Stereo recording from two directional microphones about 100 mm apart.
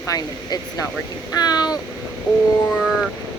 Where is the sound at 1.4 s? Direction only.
40° left (ahead or behind).